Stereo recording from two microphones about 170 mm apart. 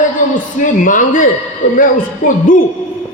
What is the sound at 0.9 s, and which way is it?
A man's voice, 50° left (ahead or behind).